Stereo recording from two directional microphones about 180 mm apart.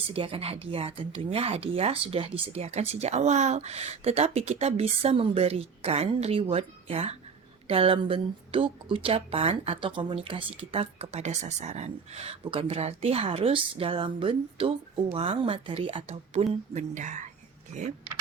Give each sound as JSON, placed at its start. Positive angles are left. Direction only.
{"t": 0.1, "sound": "speech", "side_deg": -30}